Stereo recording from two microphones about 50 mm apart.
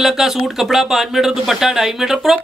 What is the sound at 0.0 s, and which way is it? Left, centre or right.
Speech, centre.